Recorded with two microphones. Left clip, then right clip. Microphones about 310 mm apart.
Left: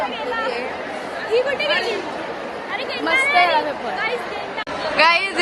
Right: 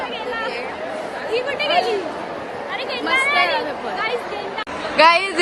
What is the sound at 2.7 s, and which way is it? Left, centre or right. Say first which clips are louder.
Chatter: even; centre.